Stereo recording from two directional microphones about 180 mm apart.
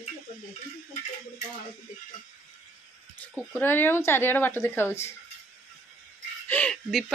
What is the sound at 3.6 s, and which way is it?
Speech, 10° left (ahead or behind).